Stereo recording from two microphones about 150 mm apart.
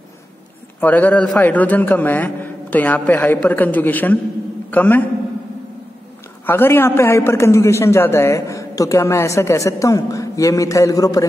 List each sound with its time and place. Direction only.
0.7 s a man's voice: 10° left (ahead or behind)
6.4 s a man's voice: 15° left (ahead or behind)